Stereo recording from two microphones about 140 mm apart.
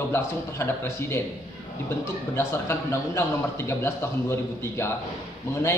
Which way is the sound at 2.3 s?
20° left (ahead or behind).